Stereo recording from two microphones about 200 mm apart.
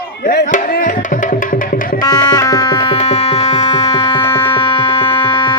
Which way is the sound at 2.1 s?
20° left (ahead or behind).